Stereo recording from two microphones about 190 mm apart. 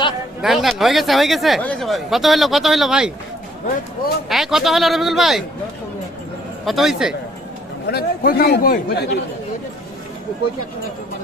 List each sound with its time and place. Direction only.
0.4 s speech: centre (ahead or behind)
4.3 s speech: centre (ahead or behind)
6.7 s speech: centre (ahead or behind)
7.9 s a man's voice: 55° left (ahead or behind)